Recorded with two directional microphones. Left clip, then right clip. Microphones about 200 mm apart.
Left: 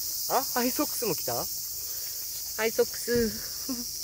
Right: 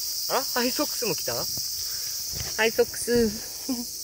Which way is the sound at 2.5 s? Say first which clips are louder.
Right 4 dB; 20° right (ahead or behind).